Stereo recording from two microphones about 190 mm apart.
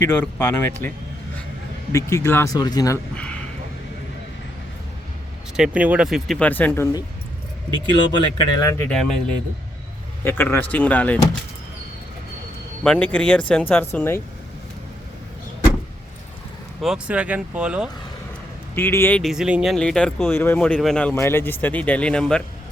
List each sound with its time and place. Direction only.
0.1 s speech: 10° left (ahead or behind)
5.5 s speech: 5° right (ahead or behind)
8.1 s speech: 25° left (ahead or behind)
8.8 s speech: 5° left (ahead or behind)
10.2 s speech: 10° left (ahead or behind)
12.8 s speech: 5° left (ahead or behind)
16.8 s speech: 5° right (ahead or behind)
18.7 s speech: 10° left (ahead or behind)